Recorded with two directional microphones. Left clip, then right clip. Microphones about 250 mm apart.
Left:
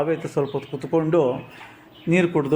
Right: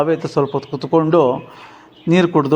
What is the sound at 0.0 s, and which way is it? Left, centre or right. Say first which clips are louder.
A man's voice: right 6 dB; centre.